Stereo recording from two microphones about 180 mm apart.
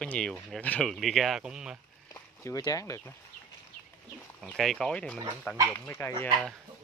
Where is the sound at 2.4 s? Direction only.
20° left (ahead or behind).